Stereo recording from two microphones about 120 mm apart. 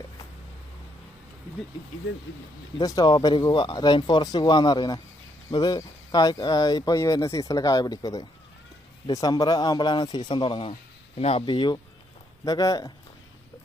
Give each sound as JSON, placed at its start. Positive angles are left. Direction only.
{"t": 2.8, "sound": "speech", "side_deg": 30}